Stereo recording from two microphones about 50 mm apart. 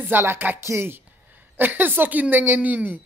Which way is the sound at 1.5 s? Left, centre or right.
Right.